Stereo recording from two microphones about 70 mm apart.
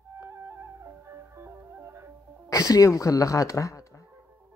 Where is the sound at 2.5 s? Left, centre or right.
Left.